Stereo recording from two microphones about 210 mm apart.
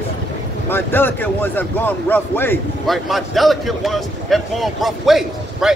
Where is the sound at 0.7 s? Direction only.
10° left (ahead or behind).